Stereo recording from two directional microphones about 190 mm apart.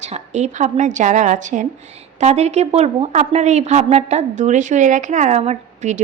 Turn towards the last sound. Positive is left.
turn(degrees=-40)  # may be behind; listen again after turning